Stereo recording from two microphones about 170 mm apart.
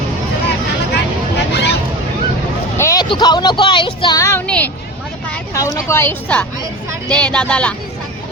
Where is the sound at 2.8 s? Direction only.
20° left (ahead or behind).